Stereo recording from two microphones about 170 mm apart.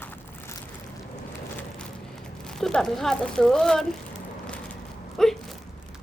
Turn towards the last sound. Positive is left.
turn(degrees=0)  # may be behind; listen again after turning